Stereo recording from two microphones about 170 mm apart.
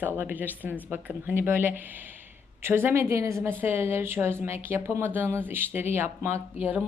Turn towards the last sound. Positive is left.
turn(degrees=-10)  # may be behind; listen again after turning